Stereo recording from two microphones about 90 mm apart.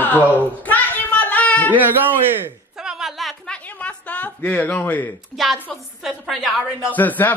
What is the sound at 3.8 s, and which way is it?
Speech, 15° left (ahead or behind).